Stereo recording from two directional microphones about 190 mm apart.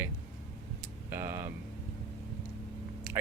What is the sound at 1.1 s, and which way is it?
Speech, 15° right (ahead or behind).